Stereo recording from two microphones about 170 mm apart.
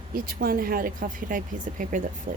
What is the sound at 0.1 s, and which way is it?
Speech, 60° right (ahead or behind).